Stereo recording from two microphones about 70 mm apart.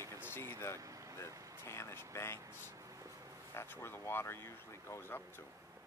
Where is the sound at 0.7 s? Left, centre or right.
Right.